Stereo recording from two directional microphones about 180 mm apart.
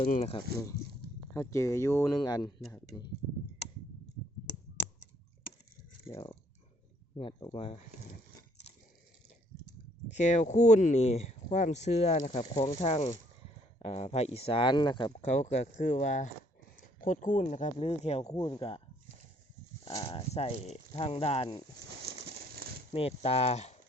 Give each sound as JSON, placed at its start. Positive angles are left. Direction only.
{"t": 0.1, "sound": "speech", "side_deg": 35}
{"t": 1.3, "sound": "speech", "side_deg": 15}
{"t": 6.1, "sound": "speech", "side_deg": 20}
{"t": 10.1, "sound": "speech", "side_deg": 40}
{"t": 15.2, "sound": "speech", "side_deg": 40}
{"t": 19.8, "sound": "speech", "side_deg": 25}
{"t": 21.8, "sound": "a sound", "side_deg": -65}
{"t": 22.9, "sound": "speech", "side_deg": 30}